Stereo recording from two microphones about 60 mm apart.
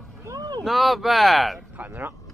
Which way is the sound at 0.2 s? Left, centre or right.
Right.